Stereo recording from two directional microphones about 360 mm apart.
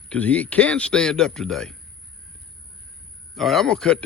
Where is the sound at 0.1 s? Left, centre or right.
Centre.